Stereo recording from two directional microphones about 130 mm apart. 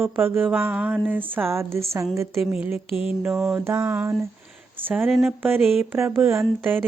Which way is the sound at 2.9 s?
45° left (ahead or behind).